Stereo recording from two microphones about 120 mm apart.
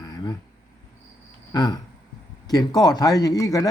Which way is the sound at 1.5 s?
35° left (ahead or behind).